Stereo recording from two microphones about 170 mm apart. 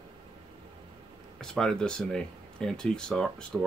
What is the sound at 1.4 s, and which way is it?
Speech, 5° left (ahead or behind).